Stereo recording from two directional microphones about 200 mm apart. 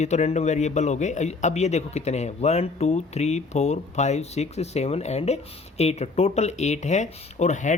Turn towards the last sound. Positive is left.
turn(degrees=35)  # may be behind; listen again after turning